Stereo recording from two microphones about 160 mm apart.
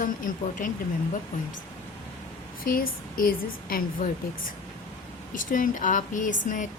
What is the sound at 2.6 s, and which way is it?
A woman's voice, 60° left (ahead or behind).